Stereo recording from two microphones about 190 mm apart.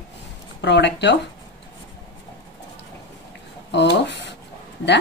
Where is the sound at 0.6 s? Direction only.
65° left (ahead or behind).